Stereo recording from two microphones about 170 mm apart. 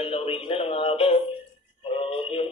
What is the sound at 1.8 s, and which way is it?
Music, 30° left (ahead or behind).